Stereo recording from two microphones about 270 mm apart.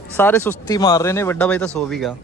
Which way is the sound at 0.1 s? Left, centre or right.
Centre.